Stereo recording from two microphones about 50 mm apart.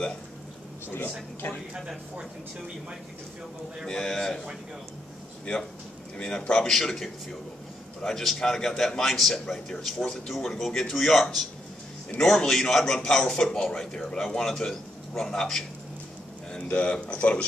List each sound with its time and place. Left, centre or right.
0.8 s speech: left
3.8 s a man's voice: centre
6.1 s a man's voice: centre
6.7 s a man's voice: centre
16.6 s speech: left